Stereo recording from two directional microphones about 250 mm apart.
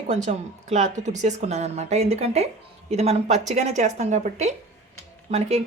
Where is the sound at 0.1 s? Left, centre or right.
Right.